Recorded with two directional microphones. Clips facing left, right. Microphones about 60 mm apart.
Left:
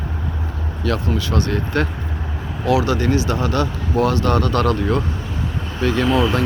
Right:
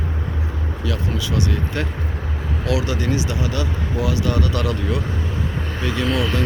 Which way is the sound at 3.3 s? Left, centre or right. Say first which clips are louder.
Left 4 dB; left.